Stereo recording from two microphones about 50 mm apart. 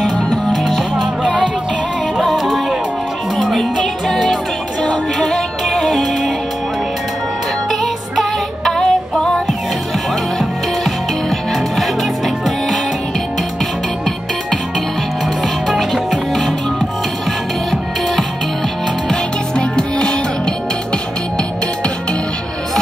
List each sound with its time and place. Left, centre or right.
2.2 s music: centre
5.2 s music: centre
7.8 s music: centre
10.4 s music: centre
15.7 s music: centre
19.0 s music: centre